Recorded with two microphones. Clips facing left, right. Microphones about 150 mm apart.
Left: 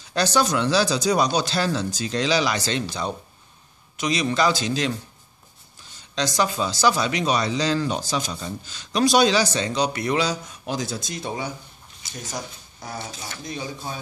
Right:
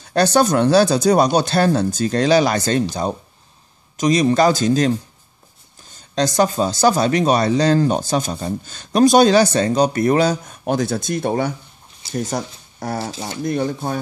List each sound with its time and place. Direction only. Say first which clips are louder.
0.0 s speech: right 6 dB; 55° right (ahead or behind)